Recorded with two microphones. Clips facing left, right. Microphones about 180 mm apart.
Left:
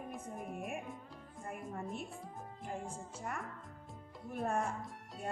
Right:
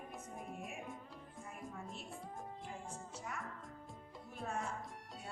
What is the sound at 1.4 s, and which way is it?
Speech, 55° left (ahead or behind).